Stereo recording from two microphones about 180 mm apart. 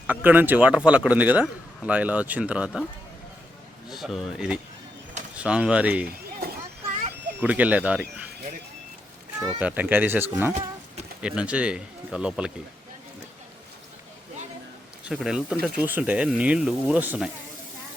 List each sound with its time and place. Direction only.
0.1 s speech: 10° right (ahead or behind)
3.8 s speech: centre (ahead or behind)
7.4 s speech: 10° right (ahead or behind)
9.6 s speech: 10° right (ahead or behind)
15.0 s speech: 5° right (ahead or behind)